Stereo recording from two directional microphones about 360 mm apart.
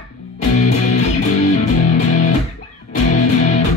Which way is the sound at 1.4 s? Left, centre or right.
Centre.